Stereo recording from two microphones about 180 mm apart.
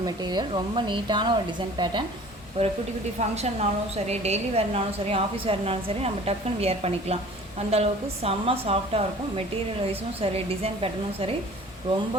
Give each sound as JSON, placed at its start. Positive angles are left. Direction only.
{"t": 0.0, "sound": "speech", "side_deg": -25}
{"t": 2.6, "sound": "a woman's voice", "side_deg": -35}